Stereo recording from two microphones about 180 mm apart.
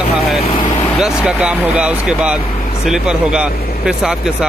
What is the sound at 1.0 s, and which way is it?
Speech, 5° right (ahead or behind).